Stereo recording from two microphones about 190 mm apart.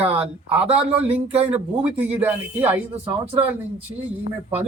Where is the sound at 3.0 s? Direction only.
30° right (ahead or behind).